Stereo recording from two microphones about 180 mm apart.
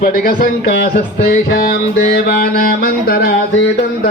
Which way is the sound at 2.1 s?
55° left (ahead or behind).